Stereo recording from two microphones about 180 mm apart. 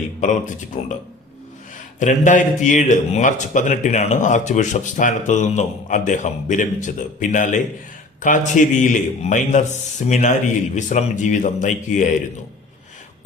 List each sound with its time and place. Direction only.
0.2 s a man's voice: 45° left (ahead or behind)
2.0 s a man's voice: 45° left (ahead or behind)